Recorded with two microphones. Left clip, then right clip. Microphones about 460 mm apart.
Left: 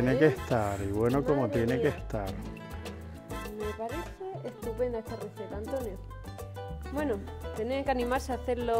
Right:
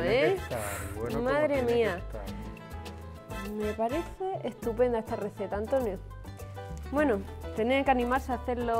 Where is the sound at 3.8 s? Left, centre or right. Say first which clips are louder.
Right 6 dB; right.